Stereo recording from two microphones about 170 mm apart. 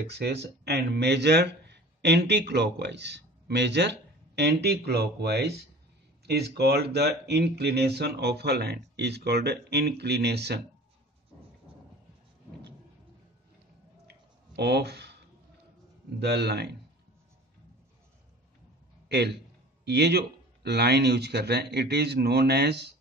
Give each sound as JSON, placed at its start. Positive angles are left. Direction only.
{"t": 0.1, "sound": "speech", "side_deg": -80}
{"t": 4.4, "sound": "speech", "side_deg": -70}
{"t": 14.0, "sound": "a sound", "side_deg": -75}
{"t": 16.2, "sound": "speech", "side_deg": -75}
{"t": 19.0, "sound": "a man's voice", "side_deg": -75}